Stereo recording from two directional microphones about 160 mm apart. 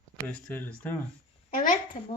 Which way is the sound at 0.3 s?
10° left (ahead or behind).